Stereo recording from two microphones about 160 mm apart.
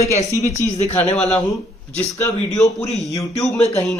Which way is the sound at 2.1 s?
20° left (ahead or behind).